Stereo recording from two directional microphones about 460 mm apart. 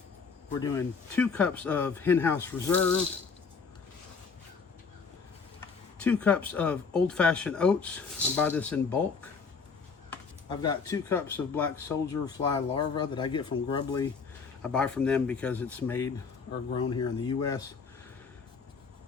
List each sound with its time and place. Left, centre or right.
0.6 s speech: centre
6.0 s speech: centre
10.1 s speech: centre